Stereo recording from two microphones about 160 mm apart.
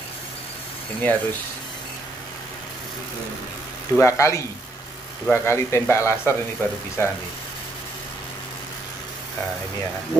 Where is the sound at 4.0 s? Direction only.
20° left (ahead or behind).